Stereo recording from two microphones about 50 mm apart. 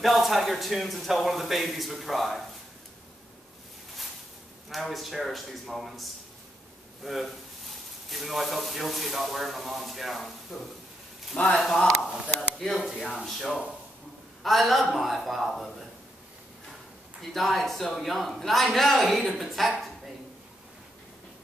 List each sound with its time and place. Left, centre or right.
0.0 s speech: centre
4.6 s speech: centre
11.3 s speech: centre
12.4 s speech: centre
13.1 s speech: centre
14.4 s speech: centre
17.2 s speech: centre